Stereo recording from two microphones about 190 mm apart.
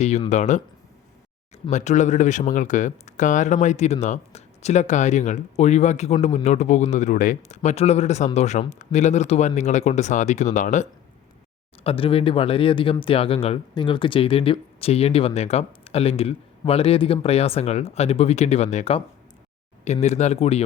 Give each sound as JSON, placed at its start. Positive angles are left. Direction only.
{"t": 0.3, "sound": "speech", "side_deg": 40}
{"t": 1.7, "sound": "speech", "side_deg": 40}
{"t": 11.8, "sound": "speech", "side_deg": 30}